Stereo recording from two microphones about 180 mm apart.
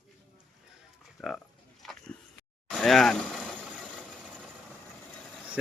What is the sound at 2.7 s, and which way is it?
Speech, 5° left (ahead or behind).